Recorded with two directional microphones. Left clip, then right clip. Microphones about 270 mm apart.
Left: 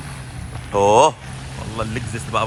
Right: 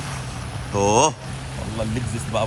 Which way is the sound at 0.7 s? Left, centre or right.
Centre.